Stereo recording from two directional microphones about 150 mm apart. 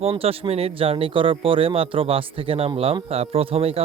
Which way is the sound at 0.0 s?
40° right (ahead or behind).